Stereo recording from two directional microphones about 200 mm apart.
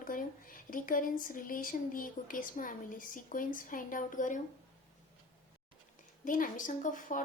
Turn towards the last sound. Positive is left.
turn(degrees=40)  # may be behind; listen again after turning